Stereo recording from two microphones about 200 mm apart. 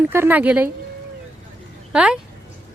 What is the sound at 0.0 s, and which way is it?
Speech, 10° right (ahead or behind).